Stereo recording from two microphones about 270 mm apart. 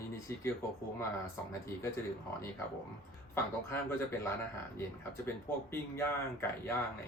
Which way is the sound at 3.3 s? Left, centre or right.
Centre.